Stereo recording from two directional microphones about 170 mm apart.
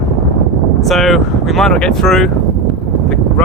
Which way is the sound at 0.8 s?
Centre (ahead or behind).